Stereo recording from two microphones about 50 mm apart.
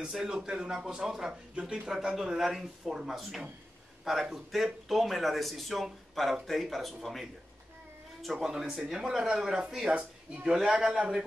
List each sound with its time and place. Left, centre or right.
0.1 s speech: centre
1.9 s speech: centre
9.8 s speech: right